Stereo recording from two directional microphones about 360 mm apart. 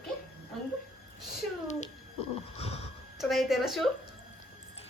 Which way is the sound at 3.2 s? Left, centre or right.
Centre.